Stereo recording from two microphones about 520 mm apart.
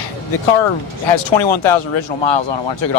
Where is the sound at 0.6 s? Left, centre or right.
Left.